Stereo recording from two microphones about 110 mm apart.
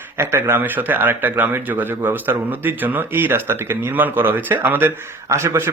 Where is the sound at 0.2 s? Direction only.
25° right (ahead or behind).